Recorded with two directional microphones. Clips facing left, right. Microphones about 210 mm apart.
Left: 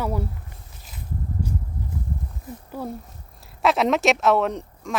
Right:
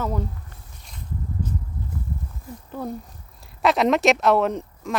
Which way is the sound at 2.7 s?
5° left (ahead or behind).